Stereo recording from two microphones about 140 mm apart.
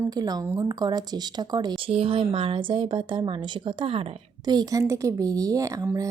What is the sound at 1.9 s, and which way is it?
Speech, 45° right (ahead or behind).